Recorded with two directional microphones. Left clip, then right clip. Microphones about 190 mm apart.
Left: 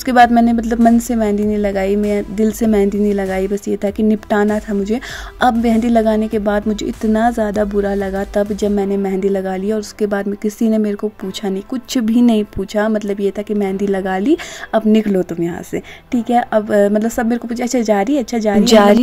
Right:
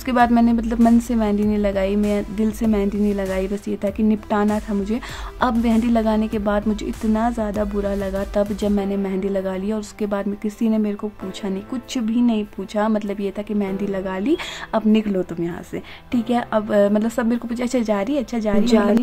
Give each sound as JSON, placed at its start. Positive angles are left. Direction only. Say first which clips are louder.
{"t": 0.0, "sound": "a woman's voice", "louder": "left 7 dB", "side_deg": 20}
{"t": 12.1, "sound": "speech", "louder": "left 7 dB", "side_deg": 35}
{"t": 12.7, "sound": "a woman's voice", "louder": "left 4 dB", "side_deg": 20}